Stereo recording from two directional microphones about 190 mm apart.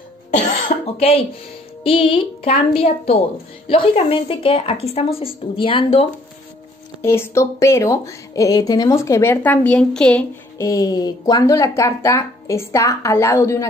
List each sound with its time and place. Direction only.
0.3 s cough: 35° left (ahead or behind)
1.8 s a woman's voice: 30° left (ahead or behind)
7.0 s a woman's voice: 15° left (ahead or behind)
10.6 s a woman's voice: 15° left (ahead or behind)